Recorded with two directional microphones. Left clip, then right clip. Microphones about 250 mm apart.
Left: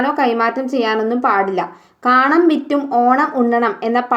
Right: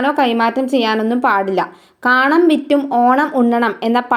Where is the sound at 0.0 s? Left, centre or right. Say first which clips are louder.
Right 1 dB; right.